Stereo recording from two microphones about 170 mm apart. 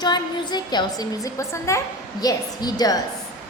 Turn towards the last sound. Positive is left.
turn(degrees=20)  # may be behind; listen again after turning